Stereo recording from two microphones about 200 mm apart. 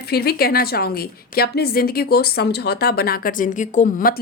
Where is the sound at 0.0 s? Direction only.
50° left (ahead or behind).